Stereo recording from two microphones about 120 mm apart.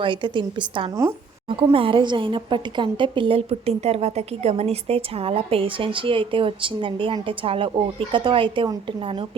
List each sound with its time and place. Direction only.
0.0 s a woman's voice: 40° right (ahead or behind)